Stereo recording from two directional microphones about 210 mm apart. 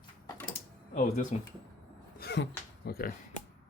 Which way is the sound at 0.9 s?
35° left (ahead or behind).